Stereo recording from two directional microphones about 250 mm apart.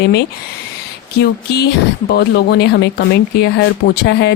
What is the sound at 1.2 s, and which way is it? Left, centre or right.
Speech, left.